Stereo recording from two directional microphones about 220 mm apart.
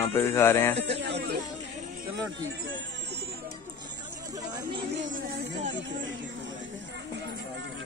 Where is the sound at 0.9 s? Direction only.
50° right (ahead or behind).